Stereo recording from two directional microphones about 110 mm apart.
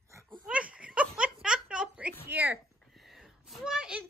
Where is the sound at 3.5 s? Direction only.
5° right (ahead or behind).